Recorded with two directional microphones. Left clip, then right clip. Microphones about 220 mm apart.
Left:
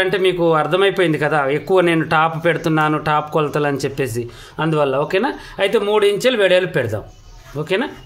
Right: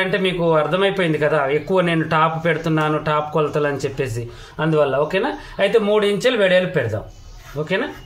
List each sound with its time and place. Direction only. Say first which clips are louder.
0.0 s a man's voice: left 3 dB; 55° left (ahead or behind)